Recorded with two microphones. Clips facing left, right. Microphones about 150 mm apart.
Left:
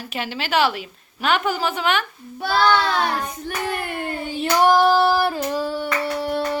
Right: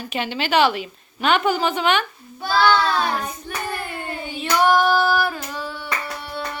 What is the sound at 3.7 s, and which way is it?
Hands, 65° left (ahead or behind).